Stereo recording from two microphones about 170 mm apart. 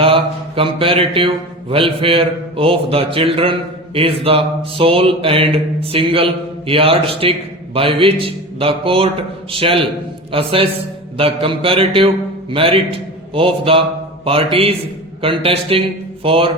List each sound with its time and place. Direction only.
0.0 s mantra: 35° right (ahead or behind)
1.7 s a man's voice: 30° right (ahead or behind)